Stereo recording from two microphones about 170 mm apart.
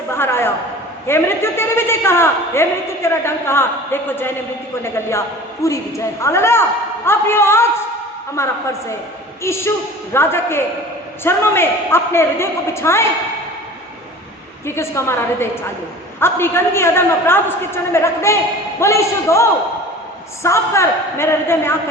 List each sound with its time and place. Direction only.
0.1 s a sound: 15° left (ahead or behind)
1.0 s a man's voice: 15° left (ahead or behind)
14.8 s a man's voice: 15° left (ahead or behind)